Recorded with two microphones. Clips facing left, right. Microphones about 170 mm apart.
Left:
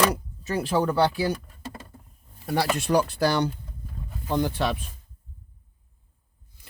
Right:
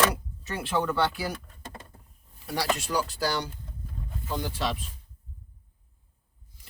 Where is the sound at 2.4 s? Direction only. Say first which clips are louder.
Left 4 dB; 50° left (ahead or behind).